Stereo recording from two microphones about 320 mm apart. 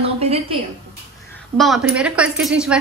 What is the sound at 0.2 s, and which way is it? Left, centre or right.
Speech, centre.